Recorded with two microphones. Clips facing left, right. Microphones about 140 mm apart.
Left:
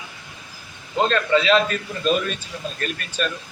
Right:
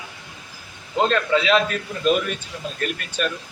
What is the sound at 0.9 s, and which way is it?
Speech, 10° right (ahead or behind).